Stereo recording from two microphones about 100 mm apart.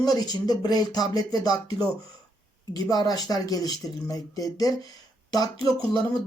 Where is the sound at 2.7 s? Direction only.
40° left (ahead or behind).